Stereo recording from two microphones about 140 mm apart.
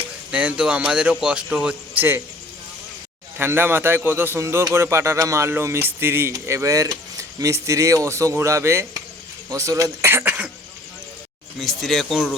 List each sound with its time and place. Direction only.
0.3 s a man's voice: 10° right (ahead or behind)
3.3 s a man's voice: 15° right (ahead or behind)
11.6 s speech: centre (ahead or behind)